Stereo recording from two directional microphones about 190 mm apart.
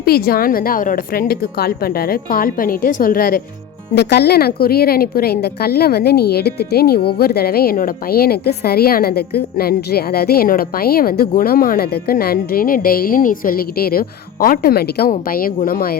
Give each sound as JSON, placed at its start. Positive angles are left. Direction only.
{"t": 0.0, "sound": "a woman's voice", "side_deg": 50}